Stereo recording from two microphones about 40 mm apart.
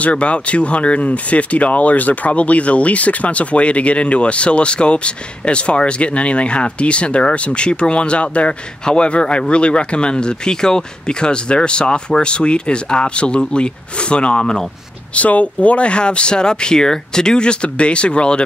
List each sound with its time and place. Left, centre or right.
0.0 s speech: left
14.4 s speech: centre
15.1 s speech: left